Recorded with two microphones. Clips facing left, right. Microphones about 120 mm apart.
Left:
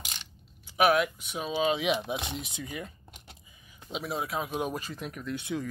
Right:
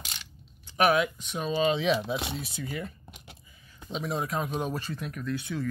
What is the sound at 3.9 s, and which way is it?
Speech, 5° left (ahead or behind).